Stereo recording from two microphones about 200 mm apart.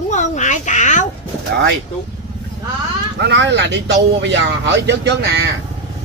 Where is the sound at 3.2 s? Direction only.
60° right (ahead or behind).